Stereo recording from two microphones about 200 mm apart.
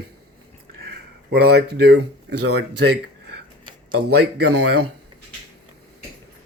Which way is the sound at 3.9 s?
55° right (ahead or behind).